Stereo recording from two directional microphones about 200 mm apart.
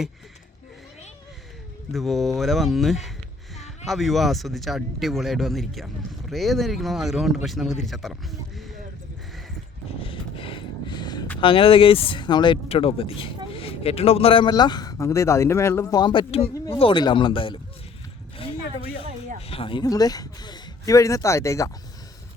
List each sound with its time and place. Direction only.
1.9 s speech: centre (ahead or behind)
10.0 s a sound: 25° left (ahead or behind)
11.3 s speech: 25° left (ahead or behind)
19.4 s speech: 30° left (ahead or behind)